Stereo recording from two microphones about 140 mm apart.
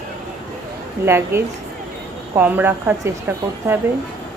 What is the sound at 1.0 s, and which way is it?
Speech, 15° right (ahead or behind).